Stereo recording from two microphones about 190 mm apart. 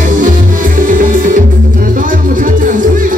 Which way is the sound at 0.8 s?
45° right (ahead or behind).